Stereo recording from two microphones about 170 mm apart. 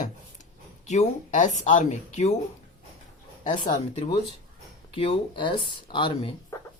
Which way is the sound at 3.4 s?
45° left (ahead or behind).